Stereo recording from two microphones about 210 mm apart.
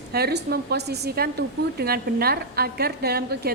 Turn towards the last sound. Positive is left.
turn(degrees=-50)  # may be behind; listen again after turning